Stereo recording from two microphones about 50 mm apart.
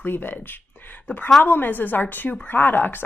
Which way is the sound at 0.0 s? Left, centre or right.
Left.